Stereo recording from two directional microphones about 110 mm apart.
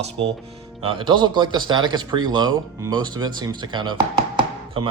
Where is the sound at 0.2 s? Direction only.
55° right (ahead or behind).